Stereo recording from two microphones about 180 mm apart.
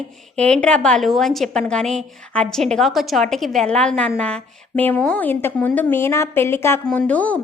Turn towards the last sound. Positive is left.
turn(degrees=10)  # may be behind; listen again after turning